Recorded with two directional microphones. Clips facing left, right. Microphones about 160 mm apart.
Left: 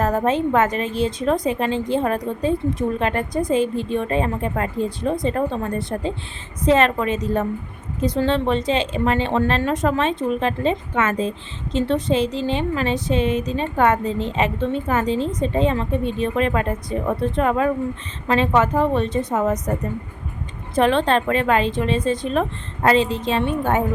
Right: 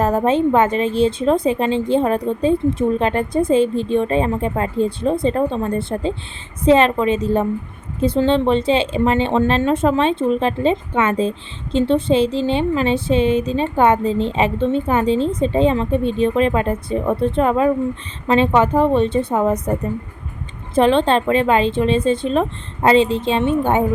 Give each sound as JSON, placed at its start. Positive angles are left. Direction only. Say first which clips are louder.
{"t": 0.3, "sound": "speech", "louder": "right 4 dB", "side_deg": -30}
{"t": 20.7, "sound": "speech", "louder": "right 3 dB", "side_deg": -30}